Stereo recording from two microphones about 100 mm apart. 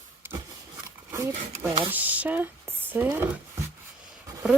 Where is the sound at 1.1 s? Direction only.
30° right (ahead or behind).